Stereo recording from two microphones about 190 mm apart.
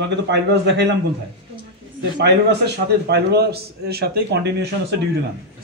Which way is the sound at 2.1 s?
60° right (ahead or behind).